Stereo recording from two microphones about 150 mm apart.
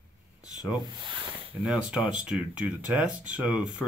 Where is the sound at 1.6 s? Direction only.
5° right (ahead or behind).